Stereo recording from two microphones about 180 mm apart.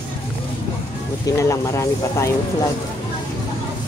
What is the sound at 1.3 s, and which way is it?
Speech, 15° left (ahead or behind).